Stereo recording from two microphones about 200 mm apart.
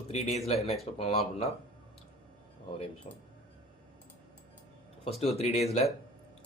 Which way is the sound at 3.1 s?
35° left (ahead or behind).